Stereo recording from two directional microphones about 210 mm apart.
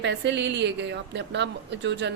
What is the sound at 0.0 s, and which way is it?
A woman's voice, 55° right (ahead or behind).